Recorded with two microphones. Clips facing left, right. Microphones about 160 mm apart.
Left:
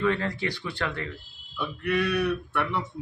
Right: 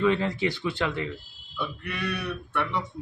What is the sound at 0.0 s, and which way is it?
Speech, 20° right (ahead or behind).